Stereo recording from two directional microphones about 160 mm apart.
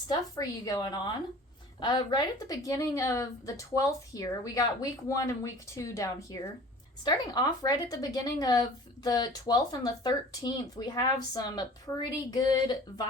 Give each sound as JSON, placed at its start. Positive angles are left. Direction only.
{"t": 0.1, "sound": "speech", "side_deg": 25}